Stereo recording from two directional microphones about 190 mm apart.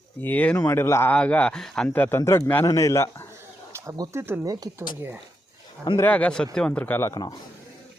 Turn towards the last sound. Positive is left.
turn(degrees=20)  # may be behind; listen again after turning